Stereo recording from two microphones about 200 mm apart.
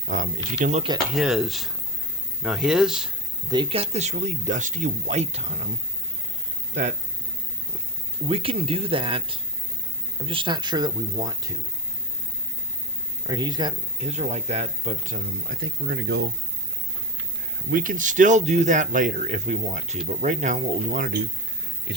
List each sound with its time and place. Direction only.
0.1 s speech: 40° right (ahead or behind)
1.1 s speech: 5° right (ahead or behind)
3.5 s speech: 25° right (ahead or behind)
8.3 s speech: 30° right (ahead or behind)
13.2 s speech: 20° right (ahead or behind)
14.0 s speech: 35° right (ahead or behind); by 16.2 s 55° right (ahead or behind)
17.7 s speech: 45° right (ahead or behind)
21.9 s a sound: 60° right (ahead or behind)